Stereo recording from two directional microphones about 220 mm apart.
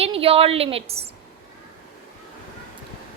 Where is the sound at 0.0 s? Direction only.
25° right (ahead or behind).